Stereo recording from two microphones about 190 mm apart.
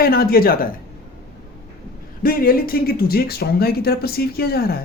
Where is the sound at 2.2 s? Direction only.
50° left (ahead or behind).